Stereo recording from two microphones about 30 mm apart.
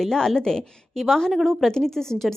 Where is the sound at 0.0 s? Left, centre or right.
Centre.